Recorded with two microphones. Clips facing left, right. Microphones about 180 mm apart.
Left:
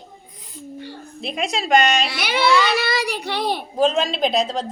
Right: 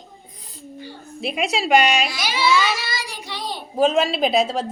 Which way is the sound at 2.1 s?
65° left (ahead or behind).